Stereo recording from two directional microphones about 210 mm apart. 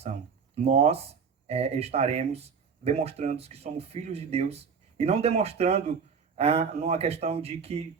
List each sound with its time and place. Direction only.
0.0 s speech: 30° right (ahead or behind)